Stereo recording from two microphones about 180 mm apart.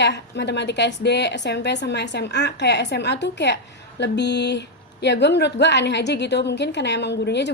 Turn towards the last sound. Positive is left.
turn(degrees=75)  # may be behind; listen again after turning